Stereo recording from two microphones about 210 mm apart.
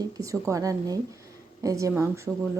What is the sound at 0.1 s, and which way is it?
A woman's voice, 15° right (ahead or behind).